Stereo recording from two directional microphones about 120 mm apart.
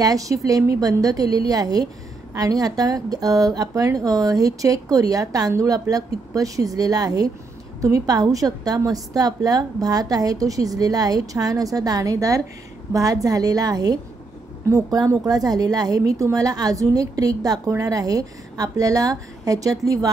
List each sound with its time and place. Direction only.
0.0 s a woman's voice: 30° right (ahead or behind)